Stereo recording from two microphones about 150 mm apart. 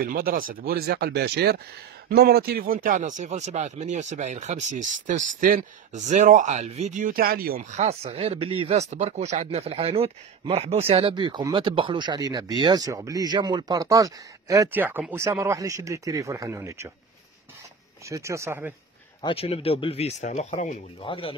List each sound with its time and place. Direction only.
0.0 s speech: 70° right (ahead or behind)
7.7 s speech: 45° right (ahead or behind); by 16.9 s 20° right (ahead or behind)
18.0 s speech: 20° right (ahead or behind)
19.2 s speech: 40° left (ahead or behind)